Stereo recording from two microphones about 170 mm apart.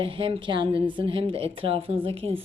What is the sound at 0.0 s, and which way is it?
A woman's voice, 30° right (ahead or behind).